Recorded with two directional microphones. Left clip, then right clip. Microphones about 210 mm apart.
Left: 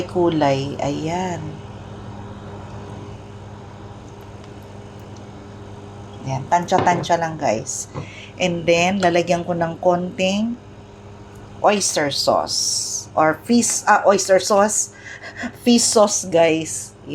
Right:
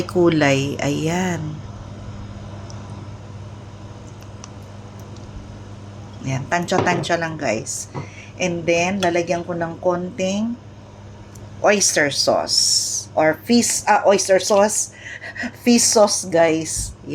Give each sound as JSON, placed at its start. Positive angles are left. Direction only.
{"t": 0.1, "sound": "speech", "side_deg": -25}
{"t": 6.2, "sound": "a woman's voice", "side_deg": -15}
{"t": 11.6, "sound": "speech", "side_deg": -5}